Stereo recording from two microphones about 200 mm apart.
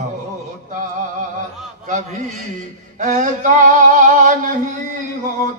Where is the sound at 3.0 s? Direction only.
40° right (ahead or behind).